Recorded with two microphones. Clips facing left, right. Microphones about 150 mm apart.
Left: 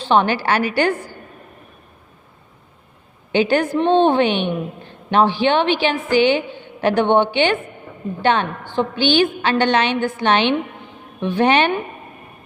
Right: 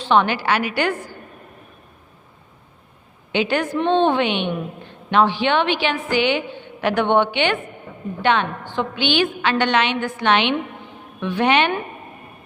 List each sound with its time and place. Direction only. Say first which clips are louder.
0.1 s a woman's voice: left 1 dB; 35° left (ahead or behind)
3.3 s a woman's voice: left 4 dB; 35° left (ahead or behind)